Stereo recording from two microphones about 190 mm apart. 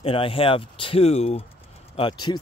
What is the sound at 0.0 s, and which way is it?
Speech, 30° left (ahead or behind).